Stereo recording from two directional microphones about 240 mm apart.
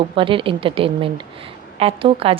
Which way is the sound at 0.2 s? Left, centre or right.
Right.